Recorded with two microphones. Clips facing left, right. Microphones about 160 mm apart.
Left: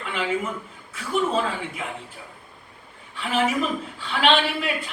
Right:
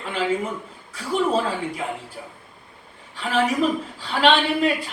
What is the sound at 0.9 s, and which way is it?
Speech, 35° right (ahead or behind).